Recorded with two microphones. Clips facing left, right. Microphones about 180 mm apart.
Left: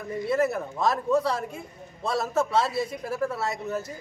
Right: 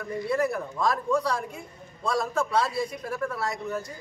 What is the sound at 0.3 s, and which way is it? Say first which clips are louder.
A man's voice: left 2 dB; 25° left (ahead or behind).